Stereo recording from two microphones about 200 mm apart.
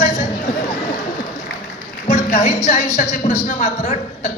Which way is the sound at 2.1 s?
35° left (ahead or behind).